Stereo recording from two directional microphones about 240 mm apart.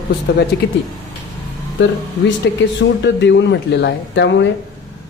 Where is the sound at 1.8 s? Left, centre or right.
Left.